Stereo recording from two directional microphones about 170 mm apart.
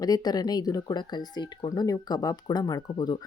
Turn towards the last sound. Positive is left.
turn(degrees=25)  # may be behind; listen again after turning